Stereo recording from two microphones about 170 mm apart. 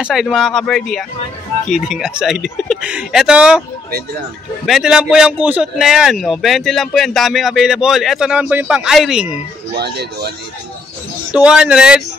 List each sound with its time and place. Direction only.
0.0 s a man's voice: centre (ahead or behind)
4.6 s a man's voice: centre (ahead or behind)
9.8 s speech: 70° right (ahead or behind)
11.3 s a man's voice: 5° right (ahead or behind)